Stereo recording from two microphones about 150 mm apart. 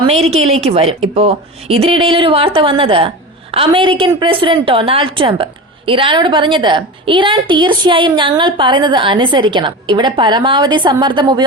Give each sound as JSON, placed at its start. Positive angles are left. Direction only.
{"t": 0.0, "sound": "a woman's voice", "side_deg": -45}